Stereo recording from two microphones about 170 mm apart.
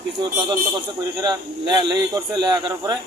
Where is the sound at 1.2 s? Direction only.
25° right (ahead or behind).